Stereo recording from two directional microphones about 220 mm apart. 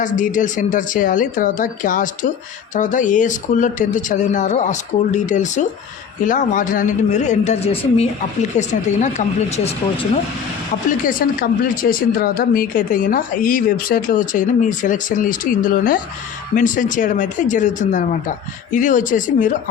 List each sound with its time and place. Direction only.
0.0 s a woman's voice: 35° left (ahead or behind)
11.0 s a woman's voice: 40° left (ahead or behind)